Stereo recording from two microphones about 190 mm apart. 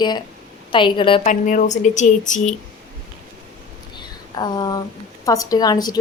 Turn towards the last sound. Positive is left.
turn(degrees=20)  # may be behind; listen again after turning